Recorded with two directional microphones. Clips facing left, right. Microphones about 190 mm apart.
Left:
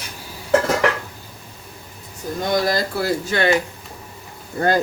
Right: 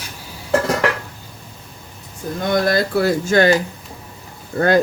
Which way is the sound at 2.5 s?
60° right (ahead or behind).